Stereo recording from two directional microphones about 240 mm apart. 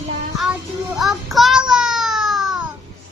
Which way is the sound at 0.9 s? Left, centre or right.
Centre.